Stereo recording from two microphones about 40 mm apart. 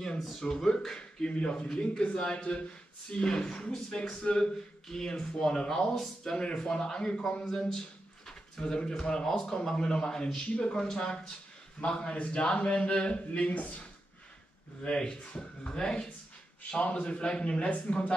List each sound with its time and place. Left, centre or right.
0.2 s speech: centre
0.5 s a man's voice: centre
8.3 s a sound: centre
9.0 s a man's voice: centre; by 13.8 s left
14.8 s a man's voice: left